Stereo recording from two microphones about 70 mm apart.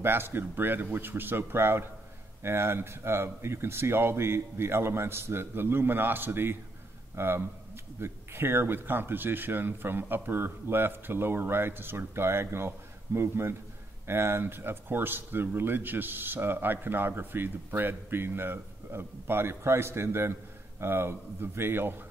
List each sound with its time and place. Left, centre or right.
0.0 s speech: right